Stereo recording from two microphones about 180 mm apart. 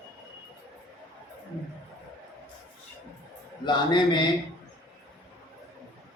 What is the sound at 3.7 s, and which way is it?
Speech, 25° left (ahead or behind).